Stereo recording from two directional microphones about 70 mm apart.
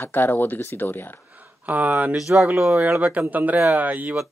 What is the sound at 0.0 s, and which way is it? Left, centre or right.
Speech, left.